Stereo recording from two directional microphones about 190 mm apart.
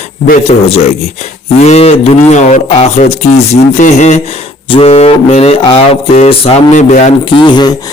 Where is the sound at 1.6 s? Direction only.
35° left (ahead or behind).